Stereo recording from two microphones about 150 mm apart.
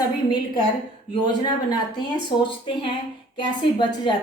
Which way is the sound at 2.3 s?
35° left (ahead or behind).